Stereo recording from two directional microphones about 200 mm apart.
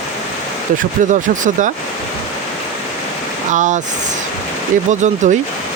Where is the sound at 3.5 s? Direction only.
40° right (ahead or behind).